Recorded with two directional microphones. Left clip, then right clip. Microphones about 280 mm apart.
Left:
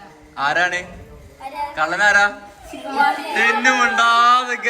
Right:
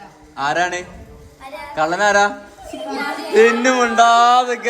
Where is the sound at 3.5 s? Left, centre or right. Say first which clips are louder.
Even; right.